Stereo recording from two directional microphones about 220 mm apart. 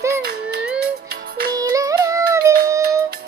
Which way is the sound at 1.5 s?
15° right (ahead or behind).